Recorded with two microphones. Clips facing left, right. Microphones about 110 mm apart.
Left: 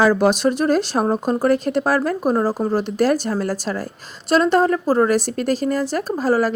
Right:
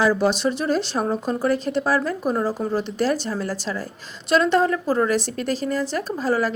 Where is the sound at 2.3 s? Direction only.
35° left (ahead or behind).